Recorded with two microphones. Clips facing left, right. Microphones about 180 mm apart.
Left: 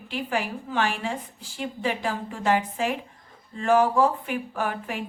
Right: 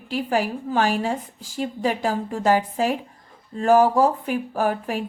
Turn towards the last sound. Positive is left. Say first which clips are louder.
# right 6 dB
turn(degrees=-40)  # may be behind; listen again after turning